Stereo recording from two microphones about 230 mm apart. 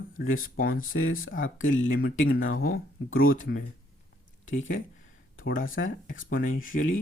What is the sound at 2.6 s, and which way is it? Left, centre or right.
Speech, left.